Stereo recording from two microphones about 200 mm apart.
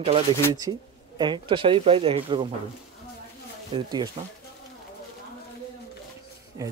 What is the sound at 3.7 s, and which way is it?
Speech, 20° right (ahead or behind).